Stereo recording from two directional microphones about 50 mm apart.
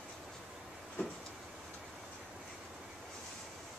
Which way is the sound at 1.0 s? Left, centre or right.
Left.